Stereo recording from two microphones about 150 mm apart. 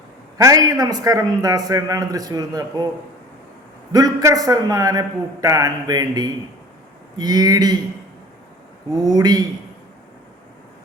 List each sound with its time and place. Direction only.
0.3 s a man's voice: 25° right (ahead or behind)
3.9 s a man's voice: 20° right (ahead or behind)
9.0 s a man's voice: 25° right (ahead or behind)